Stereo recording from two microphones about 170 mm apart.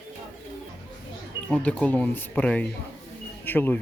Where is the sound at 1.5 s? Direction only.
10° left (ahead or behind).